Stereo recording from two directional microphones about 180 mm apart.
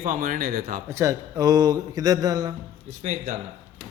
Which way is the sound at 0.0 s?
50° right (ahead or behind).